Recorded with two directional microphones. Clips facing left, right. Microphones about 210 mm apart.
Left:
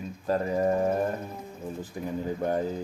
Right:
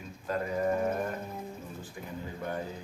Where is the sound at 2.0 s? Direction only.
35° left (ahead or behind).